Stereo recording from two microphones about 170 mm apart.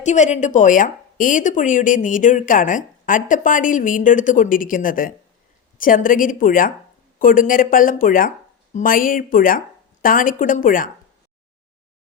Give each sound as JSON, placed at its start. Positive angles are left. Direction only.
{"t": 0.0, "sound": "a woman's voice", "side_deg": 45}